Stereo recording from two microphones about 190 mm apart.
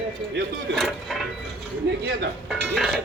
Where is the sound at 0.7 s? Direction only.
Centre (ahead or behind).